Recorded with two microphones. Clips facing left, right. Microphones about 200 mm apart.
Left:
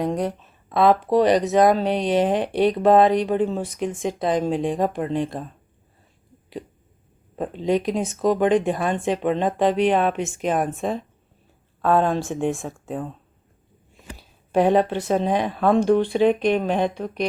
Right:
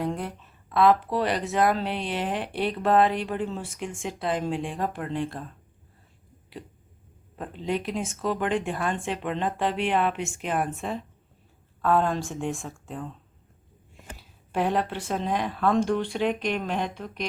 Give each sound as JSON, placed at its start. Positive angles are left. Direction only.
{"t": 0.0, "sound": "speech", "side_deg": 20}
{"t": 7.3, "sound": "speech", "side_deg": 20}
{"t": 14.5, "sound": "speech", "side_deg": 20}